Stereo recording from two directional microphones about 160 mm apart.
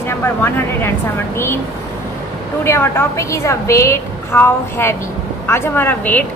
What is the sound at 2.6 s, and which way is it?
Speech, 15° left (ahead or behind).